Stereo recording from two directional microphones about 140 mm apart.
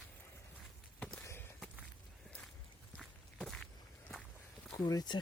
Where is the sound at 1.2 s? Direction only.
15° left (ahead or behind).